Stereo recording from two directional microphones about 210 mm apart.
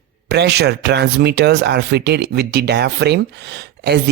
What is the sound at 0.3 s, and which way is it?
Speech, 50° right (ahead or behind).